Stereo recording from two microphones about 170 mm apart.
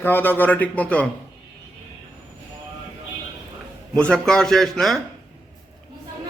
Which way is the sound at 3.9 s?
5° left (ahead or behind).